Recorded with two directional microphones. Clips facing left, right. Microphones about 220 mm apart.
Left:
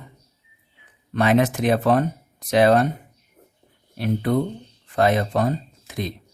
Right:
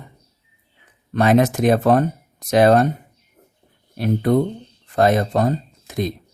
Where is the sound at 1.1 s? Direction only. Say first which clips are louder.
Right 3 dB; 40° right (ahead or behind).